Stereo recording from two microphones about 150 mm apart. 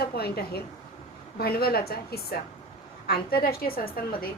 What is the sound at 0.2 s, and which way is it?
A woman's voice, 90° left.